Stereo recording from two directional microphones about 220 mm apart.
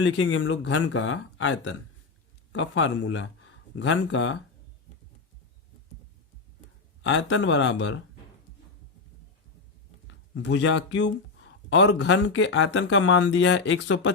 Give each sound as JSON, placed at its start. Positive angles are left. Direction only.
{"t": 0.0, "sound": "speech", "side_deg": 60}
{"t": 7.0, "sound": "speech", "side_deg": 55}
{"t": 10.1, "sound": "speech", "side_deg": 60}